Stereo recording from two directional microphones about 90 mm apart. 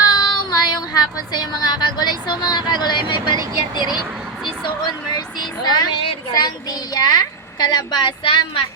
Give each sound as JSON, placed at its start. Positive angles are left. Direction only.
{"t": 0.1, "sound": "speech", "side_deg": 45}
{"t": 5.1, "sound": "a child's voice", "side_deg": 50}
{"t": 8.2, "sound": "a woman's voice", "side_deg": 75}